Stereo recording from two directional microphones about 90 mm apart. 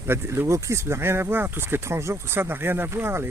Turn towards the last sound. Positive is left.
turn(degrees=-25)  # may be behind; listen again after turning